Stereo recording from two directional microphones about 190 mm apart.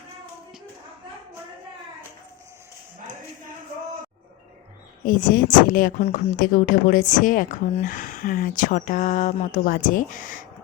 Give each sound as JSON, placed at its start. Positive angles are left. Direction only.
{"t": 5.0, "sound": "speech", "side_deg": 45}